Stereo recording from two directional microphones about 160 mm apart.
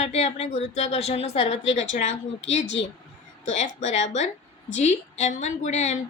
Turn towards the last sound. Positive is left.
turn(degrees=45)  # may be behind; listen again after turning